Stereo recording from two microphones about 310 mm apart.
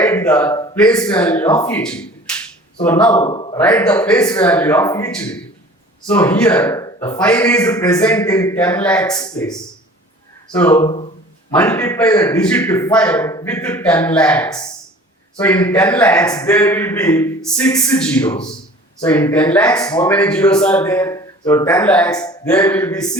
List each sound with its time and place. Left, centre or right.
0.0 s a man's voice: centre
3.2 s a man's voice: centre
3.6 s a man's voice: centre